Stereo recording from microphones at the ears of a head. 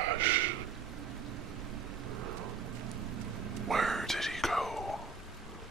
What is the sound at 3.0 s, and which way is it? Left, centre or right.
Vehicle, right.